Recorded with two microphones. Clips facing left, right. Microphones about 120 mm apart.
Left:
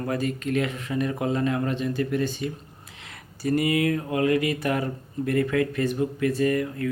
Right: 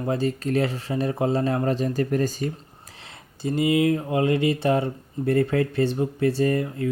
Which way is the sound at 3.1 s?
20° right (ahead or behind).